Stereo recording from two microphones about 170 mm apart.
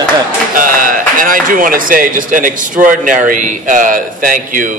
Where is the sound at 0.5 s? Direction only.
55° right (ahead or behind).